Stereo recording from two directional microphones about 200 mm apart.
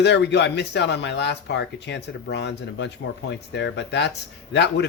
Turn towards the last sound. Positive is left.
turn(degrees=60)  # may be behind; listen again after turning